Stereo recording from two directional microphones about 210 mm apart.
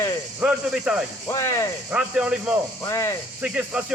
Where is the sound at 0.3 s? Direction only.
5° right (ahead or behind).